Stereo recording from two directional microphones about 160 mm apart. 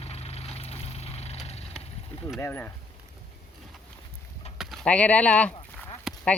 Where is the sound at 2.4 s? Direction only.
15° left (ahead or behind).